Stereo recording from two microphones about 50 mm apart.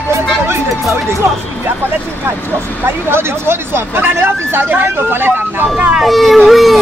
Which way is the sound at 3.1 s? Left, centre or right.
Right.